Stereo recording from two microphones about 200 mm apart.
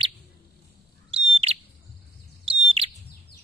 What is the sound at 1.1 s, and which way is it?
Bird, 30° right (ahead or behind).